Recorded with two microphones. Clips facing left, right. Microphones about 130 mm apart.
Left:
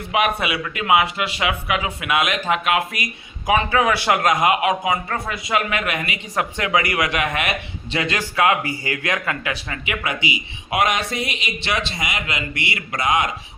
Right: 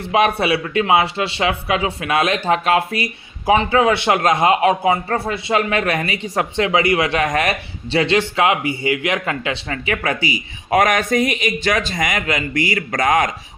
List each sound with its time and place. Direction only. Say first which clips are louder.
0.0 s speech: right 4 dB; 30° right (ahead or behind); by 13.3 s 45° right (ahead or behind)